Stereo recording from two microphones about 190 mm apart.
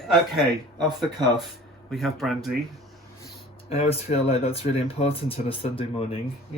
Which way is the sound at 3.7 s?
30° left (ahead or behind).